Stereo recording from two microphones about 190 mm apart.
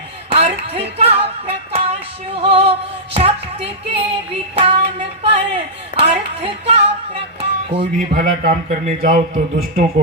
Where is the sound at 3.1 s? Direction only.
30° right (ahead or behind).